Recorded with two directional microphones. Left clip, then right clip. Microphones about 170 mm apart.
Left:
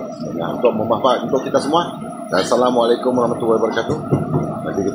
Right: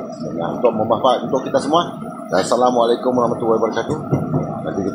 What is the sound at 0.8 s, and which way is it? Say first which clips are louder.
A man's voice: even; 25° right (ahead or behind).